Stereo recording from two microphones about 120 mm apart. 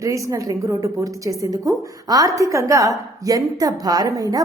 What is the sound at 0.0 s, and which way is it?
A woman's voice, 30° right (ahead or behind).